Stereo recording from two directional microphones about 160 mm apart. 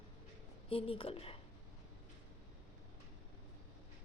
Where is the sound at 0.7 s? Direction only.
35° left (ahead or behind).